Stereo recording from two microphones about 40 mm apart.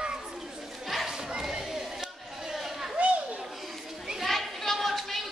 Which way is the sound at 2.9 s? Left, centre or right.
Right.